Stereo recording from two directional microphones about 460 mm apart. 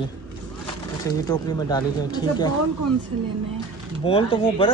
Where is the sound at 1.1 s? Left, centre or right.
Centre.